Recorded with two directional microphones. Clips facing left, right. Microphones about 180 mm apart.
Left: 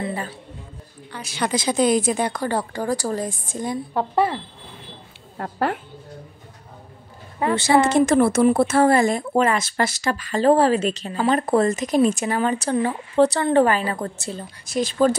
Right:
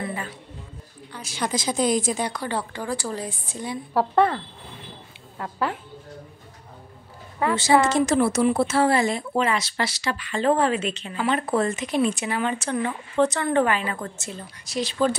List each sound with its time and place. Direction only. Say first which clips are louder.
0.0 s a sound: left 3 dB; 35° left (ahead or behind)
1.1 s speech: left 3 dB; 65° left (ahead or behind); by 3.7 s 45° left (ahead or behind)
3.9 s a woman's voice: right 2 dB; 5° left (ahead or behind)
5.4 s a woman's voice: left 4 dB; 55° left (ahead or behind)
7.5 s a woman's voice: left 3 dB; 60° left (ahead or behind); by 14.4 s 35° left (ahead or behind)
14.7 s speech: left 4 dB; 50° left (ahead or behind)